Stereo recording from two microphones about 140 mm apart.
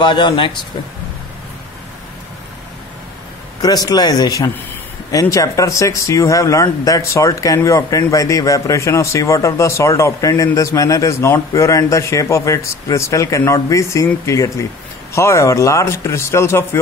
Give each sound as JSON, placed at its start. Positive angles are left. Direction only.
{"t": 0.0, "sound": "speech", "side_deg": 35}
{"t": 3.6, "sound": "speech", "side_deg": 25}